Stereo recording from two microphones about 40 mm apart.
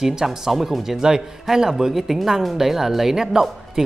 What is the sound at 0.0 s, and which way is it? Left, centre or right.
Speech, centre.